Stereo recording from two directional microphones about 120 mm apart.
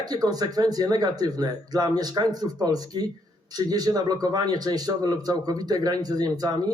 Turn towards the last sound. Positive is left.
turn(degrees=-30)  # may be behind; listen again after turning